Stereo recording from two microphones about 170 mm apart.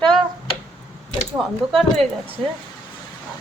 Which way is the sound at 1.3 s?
Centre (ahead or behind).